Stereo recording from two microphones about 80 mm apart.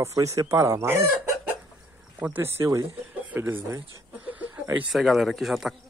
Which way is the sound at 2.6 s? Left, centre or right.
Right.